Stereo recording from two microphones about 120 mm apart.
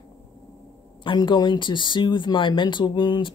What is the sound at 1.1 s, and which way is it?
A woman's voice, 40° left (ahead or behind).